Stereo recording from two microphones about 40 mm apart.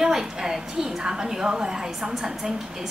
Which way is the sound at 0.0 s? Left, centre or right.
Centre.